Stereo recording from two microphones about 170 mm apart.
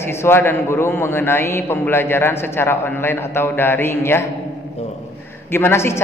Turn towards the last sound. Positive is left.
turn(degrees=15)  # may be behind; listen again after turning